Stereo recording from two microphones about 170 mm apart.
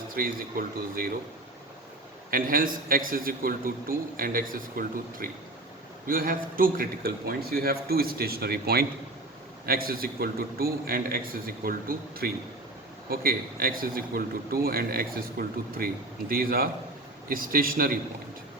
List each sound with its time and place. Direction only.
0.1 s a man's voice: 55° right (ahead or behind)
2.3 s a man's voice: 55° right (ahead or behind)